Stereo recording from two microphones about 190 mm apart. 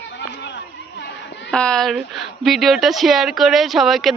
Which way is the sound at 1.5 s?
5° left (ahead or behind).